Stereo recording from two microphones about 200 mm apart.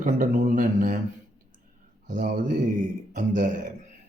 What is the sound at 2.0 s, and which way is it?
Speech, 40° right (ahead or behind).